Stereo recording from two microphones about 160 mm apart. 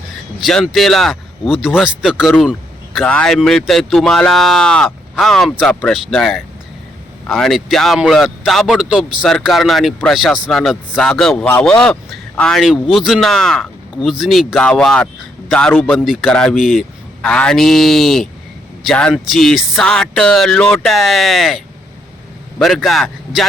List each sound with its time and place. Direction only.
0.3 s speech: centre (ahead or behind)
2.4 s a sound: centre (ahead or behind)
3.0 s speech: 5° left (ahead or behind)